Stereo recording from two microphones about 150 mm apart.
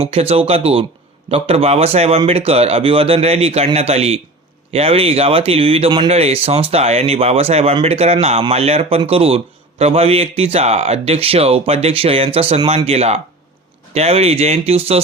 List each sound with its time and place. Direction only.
0.0 s a man's voice: 40° right (ahead or behind)